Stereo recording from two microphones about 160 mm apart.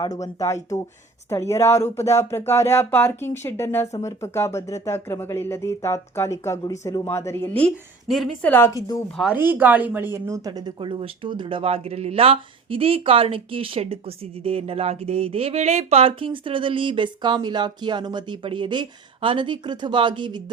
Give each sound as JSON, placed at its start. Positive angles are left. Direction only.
{"t": 0.0, "sound": "speech", "side_deg": 20}
{"t": 8.0, "sound": "speech", "side_deg": 0}
{"t": 9.1, "sound": "a woman's voice", "side_deg": -10}
{"t": 10.8, "sound": "speech", "side_deg": -30}